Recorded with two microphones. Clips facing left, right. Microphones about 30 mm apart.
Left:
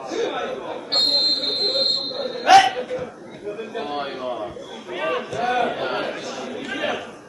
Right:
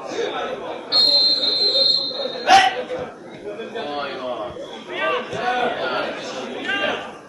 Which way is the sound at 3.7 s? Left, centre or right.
Centre.